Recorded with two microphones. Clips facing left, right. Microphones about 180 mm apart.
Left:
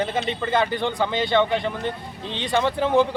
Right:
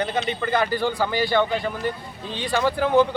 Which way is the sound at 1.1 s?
20° left (ahead or behind).